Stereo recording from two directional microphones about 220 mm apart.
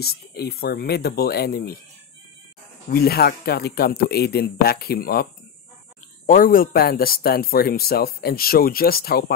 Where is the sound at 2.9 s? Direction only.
45° left (ahead or behind).